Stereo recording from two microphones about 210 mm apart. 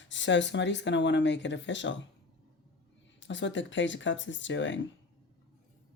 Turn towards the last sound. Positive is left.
turn(degrees=60)  # may be behind; listen again after turning